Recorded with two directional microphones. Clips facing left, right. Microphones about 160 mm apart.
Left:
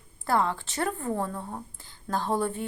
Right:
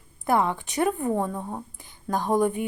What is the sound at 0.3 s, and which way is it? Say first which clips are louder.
A woman's voice: right 3 dB; 20° right (ahead or behind).